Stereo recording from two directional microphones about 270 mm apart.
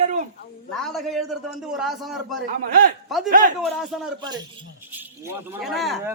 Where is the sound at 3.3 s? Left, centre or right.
Right.